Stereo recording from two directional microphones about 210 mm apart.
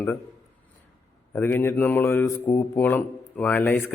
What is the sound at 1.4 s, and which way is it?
Speech, 10° left (ahead or behind).